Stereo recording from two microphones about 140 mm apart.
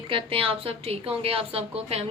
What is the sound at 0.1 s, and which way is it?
A woman's voice, 40° right (ahead or behind).